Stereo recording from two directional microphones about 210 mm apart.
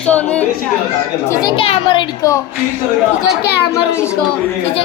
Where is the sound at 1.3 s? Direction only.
20° left (ahead or behind).